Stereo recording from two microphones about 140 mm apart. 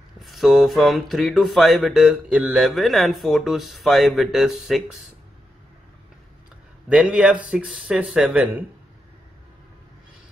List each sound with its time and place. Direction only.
0.2 s speech: centre (ahead or behind)
6.9 s speech: 10° right (ahead or behind)